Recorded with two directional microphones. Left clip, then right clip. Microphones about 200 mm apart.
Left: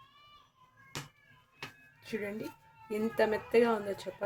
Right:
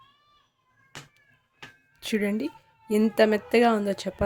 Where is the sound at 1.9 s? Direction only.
55° right (ahead or behind).